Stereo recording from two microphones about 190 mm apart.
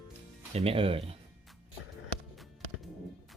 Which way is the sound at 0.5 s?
30° right (ahead or behind).